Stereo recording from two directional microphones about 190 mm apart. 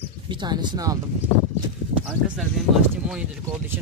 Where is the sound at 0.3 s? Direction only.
25° right (ahead or behind).